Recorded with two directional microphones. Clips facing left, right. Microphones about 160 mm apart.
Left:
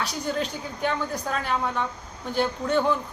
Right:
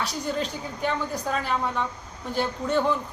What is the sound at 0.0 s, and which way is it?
A woman's voice, centre (ahead or behind).